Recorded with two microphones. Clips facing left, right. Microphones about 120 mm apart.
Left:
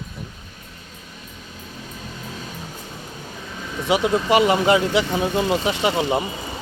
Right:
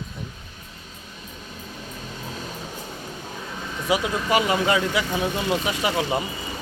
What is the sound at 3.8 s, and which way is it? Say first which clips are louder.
Speech: left 4 dB; 30° left (ahead or behind).